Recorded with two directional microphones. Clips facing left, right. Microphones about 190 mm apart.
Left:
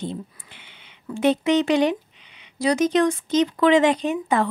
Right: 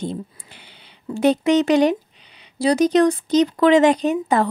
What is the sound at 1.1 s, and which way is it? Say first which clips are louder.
Speech: right 3 dB; 40° right (ahead or behind).